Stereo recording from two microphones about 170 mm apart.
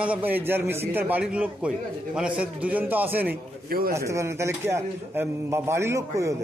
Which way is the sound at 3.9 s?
15° right (ahead or behind).